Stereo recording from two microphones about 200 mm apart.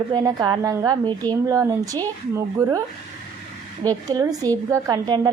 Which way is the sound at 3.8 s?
20° right (ahead or behind).